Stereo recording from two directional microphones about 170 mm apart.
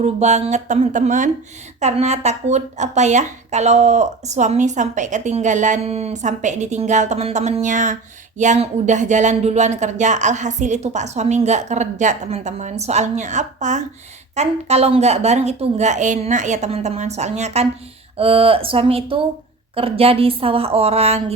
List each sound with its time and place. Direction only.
0.0 s a woman's voice: 40° right (ahead or behind)